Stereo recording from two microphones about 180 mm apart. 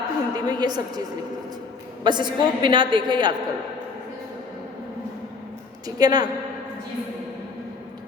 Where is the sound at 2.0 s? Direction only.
25° right (ahead or behind).